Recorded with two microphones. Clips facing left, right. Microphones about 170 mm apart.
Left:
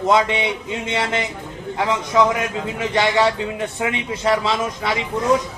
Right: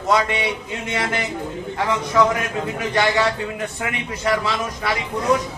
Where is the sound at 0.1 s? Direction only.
25° left (ahead or behind).